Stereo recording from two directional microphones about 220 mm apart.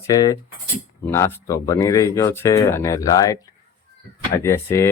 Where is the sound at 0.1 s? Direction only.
15° left (ahead or behind).